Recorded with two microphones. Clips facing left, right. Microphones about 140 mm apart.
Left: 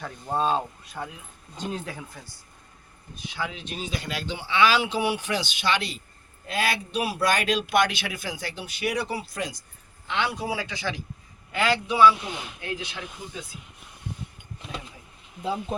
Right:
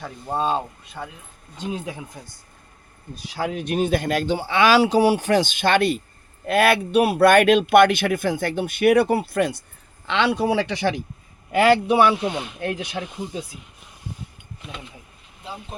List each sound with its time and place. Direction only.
0.0 s speech: 5° right (ahead or behind)
1.7 s speech: 15° right (ahead or behind)
3.3 s speech: 40° right (ahead or behind)
3.7 s speech: 55° right (ahead or behind)
12.9 s speech: 35° right (ahead or behind)